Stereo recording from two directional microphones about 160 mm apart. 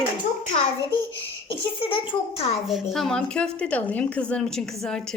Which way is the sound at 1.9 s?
35° left (ahead or behind).